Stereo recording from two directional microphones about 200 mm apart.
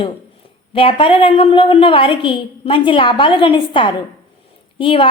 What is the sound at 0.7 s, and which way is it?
A woman's voice, 25° left (ahead or behind).